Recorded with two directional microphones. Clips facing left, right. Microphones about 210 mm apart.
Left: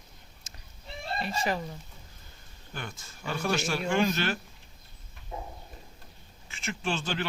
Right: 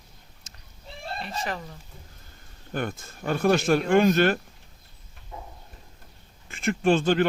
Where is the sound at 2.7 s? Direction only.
55° right (ahead or behind).